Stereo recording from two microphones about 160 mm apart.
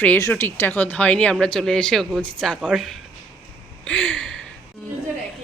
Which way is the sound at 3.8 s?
10° left (ahead or behind).